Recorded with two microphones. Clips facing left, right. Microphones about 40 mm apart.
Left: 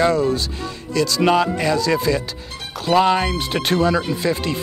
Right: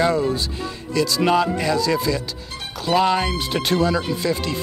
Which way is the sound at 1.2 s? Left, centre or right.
Centre.